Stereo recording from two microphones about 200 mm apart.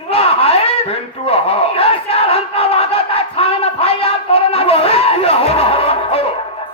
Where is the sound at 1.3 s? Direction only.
30° left (ahead or behind).